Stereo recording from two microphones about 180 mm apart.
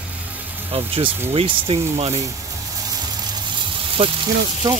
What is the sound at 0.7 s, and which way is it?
Speech, 30° right (ahead or behind).